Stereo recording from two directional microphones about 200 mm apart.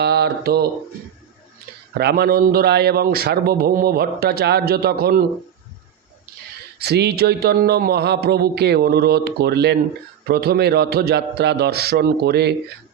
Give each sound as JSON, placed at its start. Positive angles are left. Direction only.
{"t": 0.0, "sound": "speech", "side_deg": -55}
{"t": 1.9, "sound": "a man's voice", "side_deg": -55}
{"t": 6.7, "sound": "a man's voice", "side_deg": -55}